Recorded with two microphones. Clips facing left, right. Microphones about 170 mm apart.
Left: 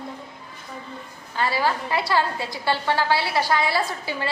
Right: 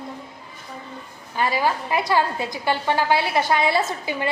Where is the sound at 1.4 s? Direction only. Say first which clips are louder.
Right 1 dB; 15° right (ahead or behind).